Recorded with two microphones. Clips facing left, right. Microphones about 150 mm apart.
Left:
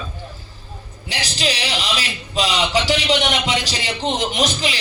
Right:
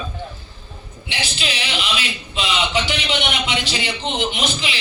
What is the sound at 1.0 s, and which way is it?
A man's voice, 40° left (ahead or behind).